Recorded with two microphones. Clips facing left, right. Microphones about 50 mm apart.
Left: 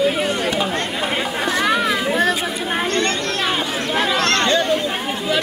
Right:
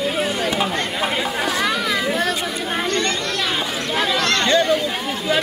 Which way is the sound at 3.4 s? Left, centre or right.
Centre.